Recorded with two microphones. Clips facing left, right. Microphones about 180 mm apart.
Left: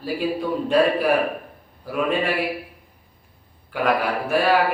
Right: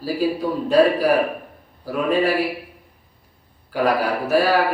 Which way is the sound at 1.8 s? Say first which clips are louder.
Right 3 dB; 40° right (ahead or behind).